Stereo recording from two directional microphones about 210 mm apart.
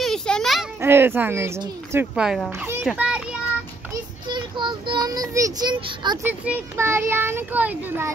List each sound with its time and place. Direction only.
0.0 s a sound: centre (ahead or behind)
0.7 s speech: 10° right (ahead or behind)
3.9 s child singing: 20° right (ahead or behind)
6.2 s speech: 10° right (ahead or behind)